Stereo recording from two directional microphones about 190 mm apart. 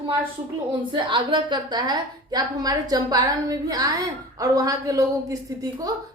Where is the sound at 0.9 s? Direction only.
25° right (ahead or behind).